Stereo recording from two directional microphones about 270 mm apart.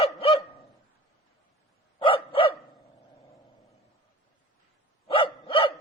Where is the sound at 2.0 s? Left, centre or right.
Centre.